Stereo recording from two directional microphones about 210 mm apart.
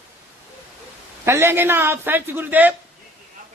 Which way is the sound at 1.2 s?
10° right (ahead or behind).